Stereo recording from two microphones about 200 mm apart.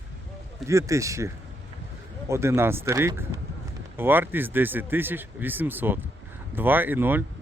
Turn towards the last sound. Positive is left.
turn(degrees=-10)  # may be behind; listen again after turning